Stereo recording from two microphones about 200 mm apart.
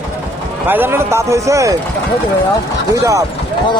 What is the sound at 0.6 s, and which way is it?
Speech, 10° right (ahead or behind).